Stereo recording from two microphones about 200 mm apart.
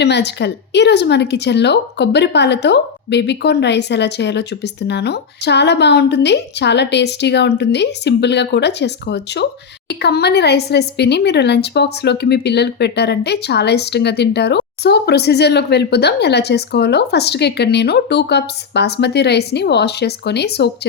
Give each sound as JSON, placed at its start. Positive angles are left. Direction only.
{"t": 0.0, "sound": "speech", "side_deg": 60}